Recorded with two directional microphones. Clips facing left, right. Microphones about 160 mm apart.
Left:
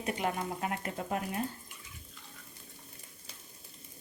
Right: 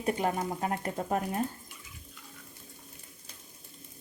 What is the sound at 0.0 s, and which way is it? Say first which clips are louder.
Speech: right 4 dB; 35° right (ahead or behind).